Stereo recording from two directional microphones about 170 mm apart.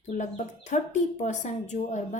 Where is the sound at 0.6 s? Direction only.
45° left (ahead or behind).